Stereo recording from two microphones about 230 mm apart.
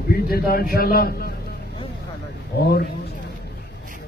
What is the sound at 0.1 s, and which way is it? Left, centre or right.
A man's voice, left.